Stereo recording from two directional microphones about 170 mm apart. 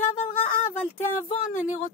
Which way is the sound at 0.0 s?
45° left (ahead or behind).